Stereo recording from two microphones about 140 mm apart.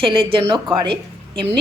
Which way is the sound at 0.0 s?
40° right (ahead or behind).